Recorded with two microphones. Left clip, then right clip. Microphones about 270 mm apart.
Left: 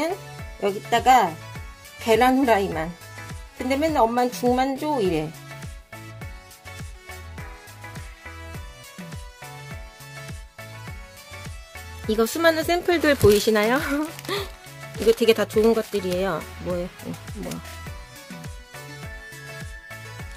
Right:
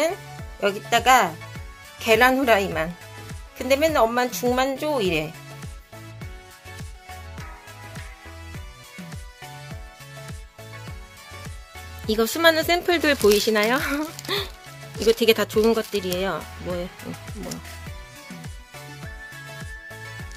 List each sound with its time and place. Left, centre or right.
0.6 s speech: centre
12.1 s speech: centre